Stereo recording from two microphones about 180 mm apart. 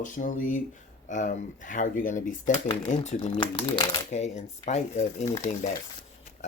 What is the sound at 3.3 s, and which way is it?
Speech, 25° left (ahead or behind).